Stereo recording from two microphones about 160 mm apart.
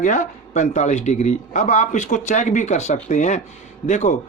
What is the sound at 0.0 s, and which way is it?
Speech, 50° left (ahead or behind).